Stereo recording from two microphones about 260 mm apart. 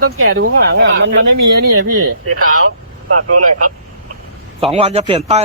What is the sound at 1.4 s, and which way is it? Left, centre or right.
Speech, right.